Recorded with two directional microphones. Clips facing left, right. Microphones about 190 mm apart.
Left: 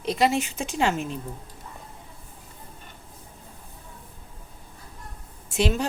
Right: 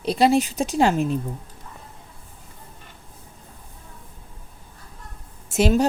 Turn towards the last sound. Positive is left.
turn(degrees=-40)  # may be behind; listen again after turning